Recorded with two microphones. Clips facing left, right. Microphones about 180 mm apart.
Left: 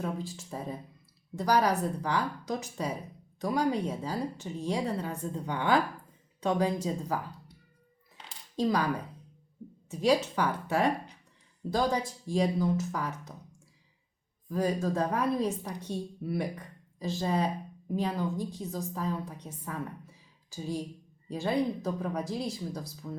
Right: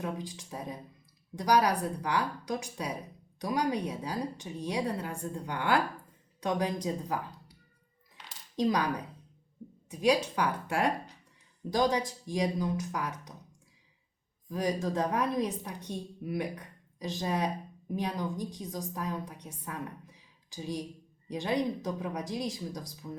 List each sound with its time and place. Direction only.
0.0 s a woman's voice: 15° right (ahead or behind)
9.9 s a woman's voice: 10° right (ahead or behind)
14.5 s a woman's voice: 15° right (ahead or behind)